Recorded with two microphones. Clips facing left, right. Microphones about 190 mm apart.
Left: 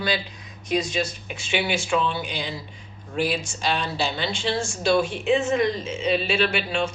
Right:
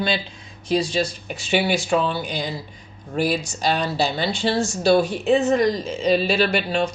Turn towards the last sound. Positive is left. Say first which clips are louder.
# right 3 dB
turn(degrees=-35)  # may be behind; listen again after turning